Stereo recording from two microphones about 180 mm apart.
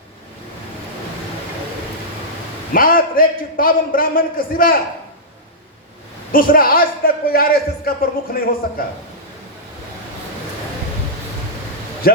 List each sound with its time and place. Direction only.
2.7 s a man's voice: 50° left (ahead or behind)
6.3 s a man's voice: 50° left (ahead or behind)
12.1 s a man's voice: 55° left (ahead or behind)